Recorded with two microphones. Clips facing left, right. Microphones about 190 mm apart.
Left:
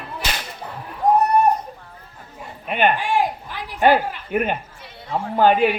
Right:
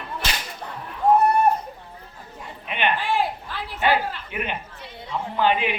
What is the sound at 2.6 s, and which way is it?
Speech, 45° left (ahead or behind).